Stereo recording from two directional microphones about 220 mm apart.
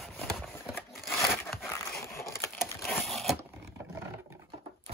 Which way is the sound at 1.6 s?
10° left (ahead or behind).